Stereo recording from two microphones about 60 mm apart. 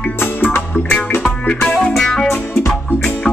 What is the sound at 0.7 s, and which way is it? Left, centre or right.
Music, left.